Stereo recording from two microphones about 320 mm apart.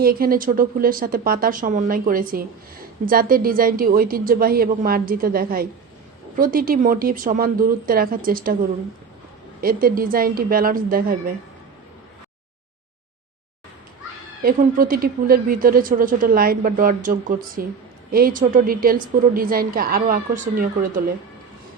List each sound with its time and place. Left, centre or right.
0.0 s a woman's voice: right
9.6 s a woman's voice: right
14.4 s a woman's voice: right